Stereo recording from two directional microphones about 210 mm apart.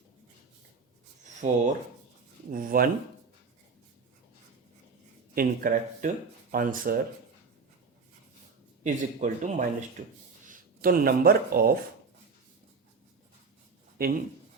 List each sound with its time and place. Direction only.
1.2 s rub: 35° right (ahead or behind)
2.5 s speech: 40° right (ahead or behind)
5.3 s speech: 45° right (ahead or behind)
8.8 s speech: 35° right (ahead or behind)